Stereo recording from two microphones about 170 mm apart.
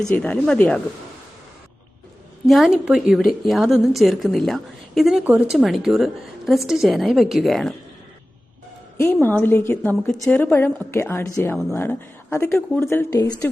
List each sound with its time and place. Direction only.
0.2 s a woman's voice: 5° left (ahead or behind)
2.5 s a woman's voice: centre (ahead or behind)
9.2 s speech: 10° left (ahead or behind)